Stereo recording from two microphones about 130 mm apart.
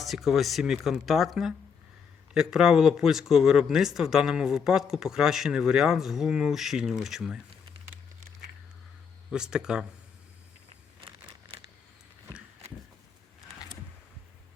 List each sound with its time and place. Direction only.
0.0 s speech: centre (ahead or behind)
9.3 s speech: 5° right (ahead or behind)
11.3 s a sound: 45° right (ahead or behind)